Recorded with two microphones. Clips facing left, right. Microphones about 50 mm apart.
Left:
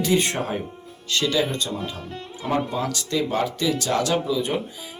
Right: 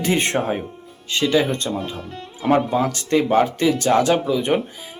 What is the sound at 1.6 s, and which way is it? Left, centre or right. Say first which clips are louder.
Speech: right 4 dB; centre.